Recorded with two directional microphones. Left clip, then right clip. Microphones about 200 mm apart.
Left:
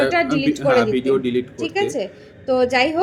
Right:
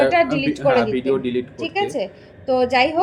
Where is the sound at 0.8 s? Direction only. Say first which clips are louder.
Left 2 dB; 15° left (ahead or behind).